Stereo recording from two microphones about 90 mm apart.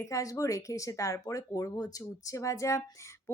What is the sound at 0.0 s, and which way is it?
Speech, 40° left (ahead or behind).